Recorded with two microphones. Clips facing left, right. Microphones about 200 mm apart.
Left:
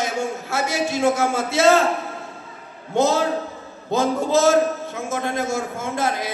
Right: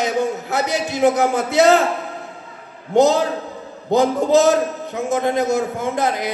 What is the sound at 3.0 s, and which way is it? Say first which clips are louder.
A man's voice: right 4 dB; 15° right (ahead or behind).